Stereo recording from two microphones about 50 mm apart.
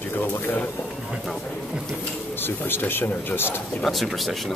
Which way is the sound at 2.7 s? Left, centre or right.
Left.